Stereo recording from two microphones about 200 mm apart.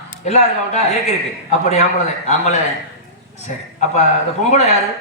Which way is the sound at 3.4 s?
35° left (ahead or behind).